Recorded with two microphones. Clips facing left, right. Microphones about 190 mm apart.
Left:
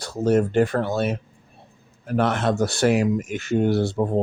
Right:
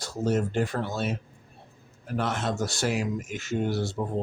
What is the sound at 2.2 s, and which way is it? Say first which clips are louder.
Speech: left 7 dB; 60° left (ahead or behind).